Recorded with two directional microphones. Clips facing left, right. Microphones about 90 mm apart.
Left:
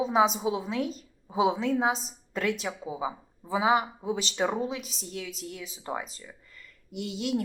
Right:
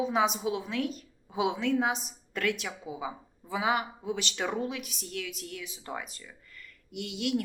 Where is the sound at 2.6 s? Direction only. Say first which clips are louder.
Left 4 dB; 35° left (ahead or behind).